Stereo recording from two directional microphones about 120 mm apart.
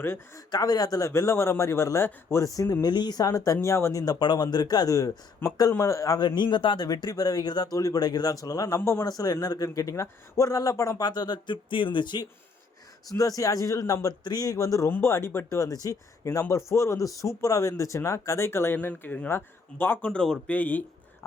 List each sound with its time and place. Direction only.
0.0 s speech: 20° left (ahead or behind)
0.5 s speech: 30° left (ahead or behind); by 20.8 s 15° left (ahead or behind)